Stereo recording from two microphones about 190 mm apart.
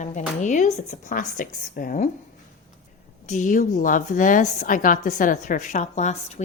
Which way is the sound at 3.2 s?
40° left (ahead or behind).